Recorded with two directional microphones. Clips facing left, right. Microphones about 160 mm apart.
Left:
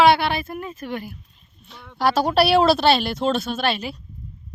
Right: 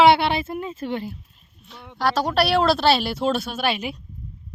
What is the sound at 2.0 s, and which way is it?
Speech, 10° left (ahead or behind).